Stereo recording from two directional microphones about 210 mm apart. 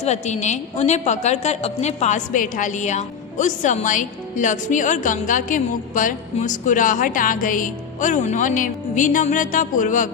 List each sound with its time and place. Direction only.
0.0 s a woman's voice: 35° left (ahead or behind)